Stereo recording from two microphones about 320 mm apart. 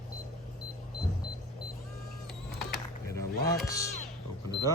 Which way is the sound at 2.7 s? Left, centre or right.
Centre.